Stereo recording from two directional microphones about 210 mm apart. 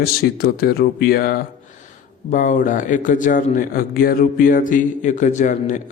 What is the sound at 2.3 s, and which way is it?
A man's voice, 35° left (ahead or behind).